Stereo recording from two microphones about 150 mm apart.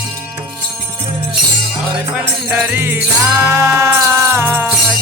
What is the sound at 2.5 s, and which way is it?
Music, 10° right (ahead or behind).